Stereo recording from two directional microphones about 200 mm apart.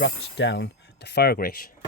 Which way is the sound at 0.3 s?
60° left (ahead or behind).